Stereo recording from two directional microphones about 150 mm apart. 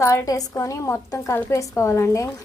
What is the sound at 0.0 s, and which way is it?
Speech, 20° left (ahead or behind).